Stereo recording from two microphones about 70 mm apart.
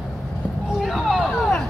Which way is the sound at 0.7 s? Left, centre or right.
Centre.